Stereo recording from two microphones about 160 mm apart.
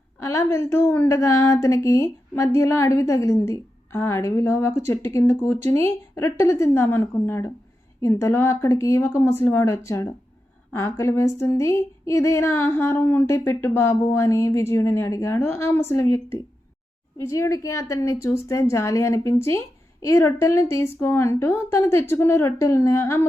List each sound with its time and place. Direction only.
0.2 s a woman's voice: 20° left (ahead or behind)